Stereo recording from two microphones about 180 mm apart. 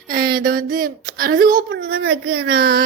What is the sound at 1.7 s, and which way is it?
Speech, 90° right.